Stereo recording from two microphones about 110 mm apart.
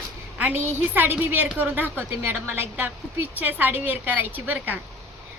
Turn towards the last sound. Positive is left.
turn(degrees=-15)  # may be behind; listen again after turning